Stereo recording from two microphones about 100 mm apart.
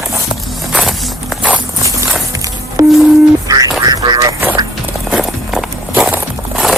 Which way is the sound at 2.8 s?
35° right (ahead or behind).